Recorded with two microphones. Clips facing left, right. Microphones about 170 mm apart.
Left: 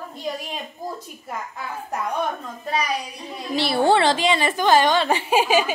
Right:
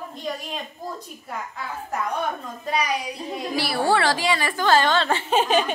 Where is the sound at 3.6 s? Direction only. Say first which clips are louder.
Left 4 dB; 25° left (ahead or behind).